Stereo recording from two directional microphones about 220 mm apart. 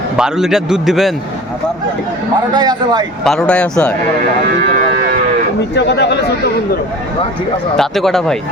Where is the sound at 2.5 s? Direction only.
20° right (ahead or behind).